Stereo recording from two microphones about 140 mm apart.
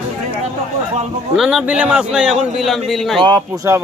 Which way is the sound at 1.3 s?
5° right (ahead or behind).